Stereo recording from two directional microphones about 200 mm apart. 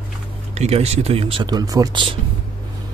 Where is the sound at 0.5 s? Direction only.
30° right (ahead or behind).